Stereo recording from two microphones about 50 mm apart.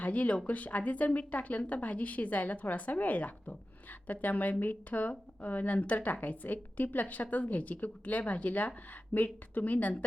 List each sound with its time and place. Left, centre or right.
0.0 s a woman's voice: left